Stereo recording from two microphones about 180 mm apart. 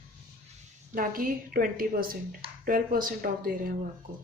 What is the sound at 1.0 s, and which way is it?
A woman's voice, 50° right (ahead or behind).